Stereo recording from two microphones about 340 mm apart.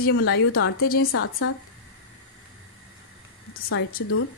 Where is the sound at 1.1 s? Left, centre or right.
Left.